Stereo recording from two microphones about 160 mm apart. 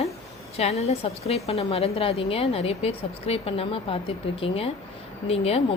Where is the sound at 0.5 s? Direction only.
40° left (ahead or behind).